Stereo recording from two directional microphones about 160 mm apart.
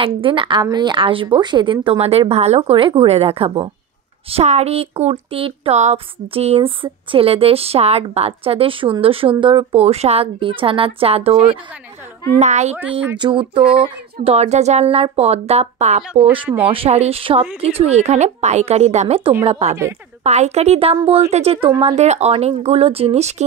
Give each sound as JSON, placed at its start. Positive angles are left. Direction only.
{"t": 0.2, "sound": "a woman's voice", "side_deg": -30}
{"t": 13.2, "sound": "a woman's voice", "side_deg": -30}